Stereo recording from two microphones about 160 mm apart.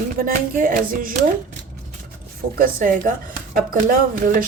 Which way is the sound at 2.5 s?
60° right (ahead or behind).